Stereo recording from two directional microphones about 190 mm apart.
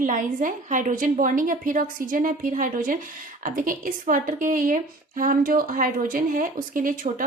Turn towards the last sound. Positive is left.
turn(degrees=-45)  # may be behind; listen again after turning